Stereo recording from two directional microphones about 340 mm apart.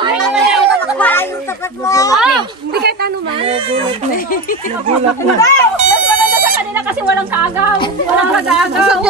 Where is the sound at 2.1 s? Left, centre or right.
Centre.